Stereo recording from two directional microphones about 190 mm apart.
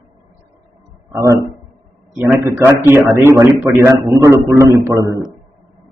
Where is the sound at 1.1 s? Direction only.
15° right (ahead or behind).